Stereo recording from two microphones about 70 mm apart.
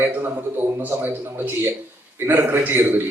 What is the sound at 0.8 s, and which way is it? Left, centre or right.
A man's voice, right.